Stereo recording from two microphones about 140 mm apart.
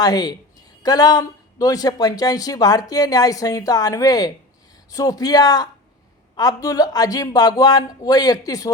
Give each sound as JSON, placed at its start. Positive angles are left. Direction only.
{"t": 0.0, "sound": "speech", "side_deg": 30}